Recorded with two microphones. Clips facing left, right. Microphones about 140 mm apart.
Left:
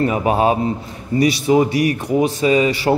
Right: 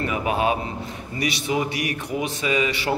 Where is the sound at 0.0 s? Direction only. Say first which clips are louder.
Left 7 dB; 35° left (ahead or behind).